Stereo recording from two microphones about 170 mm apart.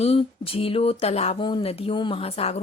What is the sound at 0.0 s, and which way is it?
A woman's voice, 35° left (ahead or behind).